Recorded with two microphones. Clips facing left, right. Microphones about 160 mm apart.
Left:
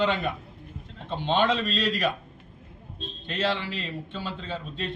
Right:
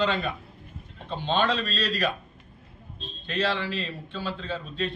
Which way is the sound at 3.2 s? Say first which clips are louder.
Right 1 dB; 20° left (ahead or behind).